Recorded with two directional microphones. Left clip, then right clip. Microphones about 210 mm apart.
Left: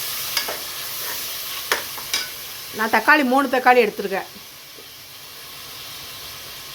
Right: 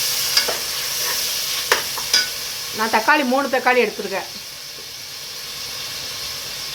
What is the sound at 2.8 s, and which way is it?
Speech, 20° left (ahead or behind).